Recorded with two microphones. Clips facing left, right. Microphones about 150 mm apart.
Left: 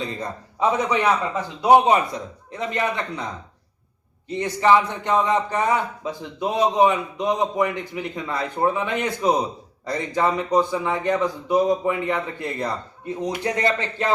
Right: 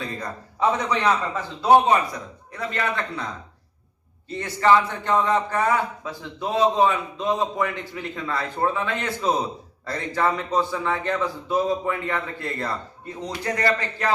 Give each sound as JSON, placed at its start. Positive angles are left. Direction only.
{"t": 0.9, "sound": "a man's voice", "side_deg": 15}
{"t": 4.3, "sound": "a man's voice", "side_deg": 15}